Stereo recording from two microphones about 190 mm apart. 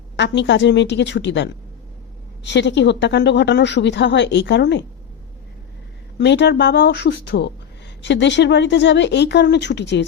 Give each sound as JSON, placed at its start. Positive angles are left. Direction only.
{"t": 0.2, "sound": "a woman's voice", "side_deg": 70}
{"t": 6.1, "sound": "a woman's voice", "side_deg": 65}